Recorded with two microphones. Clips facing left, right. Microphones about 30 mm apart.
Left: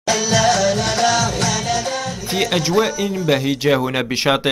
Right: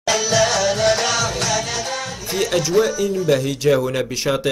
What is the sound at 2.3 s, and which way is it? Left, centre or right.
Speech, left.